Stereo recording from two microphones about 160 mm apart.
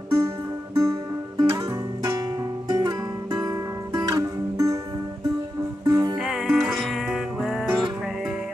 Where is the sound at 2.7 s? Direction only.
25° right (ahead or behind).